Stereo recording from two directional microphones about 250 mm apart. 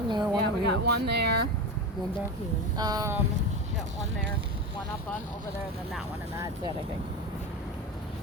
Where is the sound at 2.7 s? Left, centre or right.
Centre.